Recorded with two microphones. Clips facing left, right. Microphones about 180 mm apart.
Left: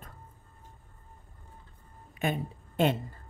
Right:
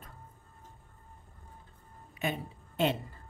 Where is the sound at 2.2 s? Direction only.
50° left (ahead or behind).